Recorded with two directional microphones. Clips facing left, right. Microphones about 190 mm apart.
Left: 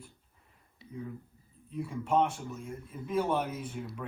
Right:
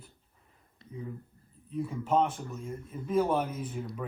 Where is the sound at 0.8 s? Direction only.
5° left (ahead or behind).